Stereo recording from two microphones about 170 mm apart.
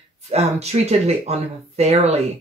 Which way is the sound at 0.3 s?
40° right (ahead or behind).